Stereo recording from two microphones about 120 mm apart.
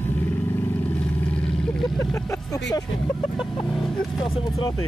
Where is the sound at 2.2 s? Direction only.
30° left (ahead or behind).